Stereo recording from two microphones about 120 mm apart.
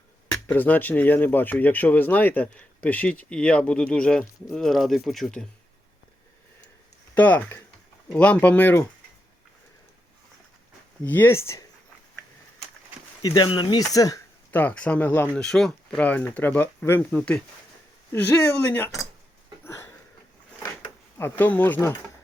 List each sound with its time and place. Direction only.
0.4 s speech: 15° left (ahead or behind)
7.1 s speech: 15° left (ahead or behind)
11.0 s speech: 15° left (ahead or behind)
13.2 s speech: 40° left (ahead or behind)
14.5 s speech: 15° left (ahead or behind)
15.4 s speech: 5° left (ahead or behind)
19.6 s a sound: 20° left (ahead or behind)
21.2 s speech: 15° left (ahead or behind)